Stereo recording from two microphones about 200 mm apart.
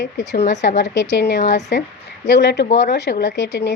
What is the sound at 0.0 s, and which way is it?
A woman's voice, 60° left (ahead or behind).